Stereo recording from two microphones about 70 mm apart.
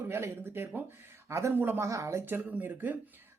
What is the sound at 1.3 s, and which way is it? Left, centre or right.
Speech, right.